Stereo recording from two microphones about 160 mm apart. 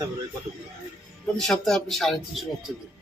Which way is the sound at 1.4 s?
5° left (ahead or behind).